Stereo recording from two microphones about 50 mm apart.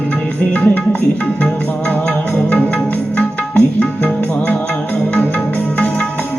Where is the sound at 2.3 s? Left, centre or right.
Left.